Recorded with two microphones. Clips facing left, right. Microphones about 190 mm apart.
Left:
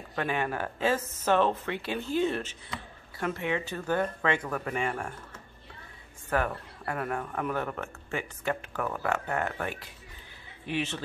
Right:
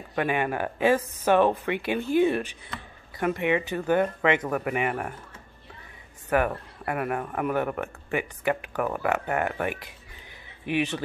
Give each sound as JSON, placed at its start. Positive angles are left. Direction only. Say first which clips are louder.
{"t": 0.1, "sound": "speech", "louder": "right 4 dB", "side_deg": -15}
{"t": 6.3, "sound": "a man's voice", "louder": "right 5 dB", "side_deg": -15}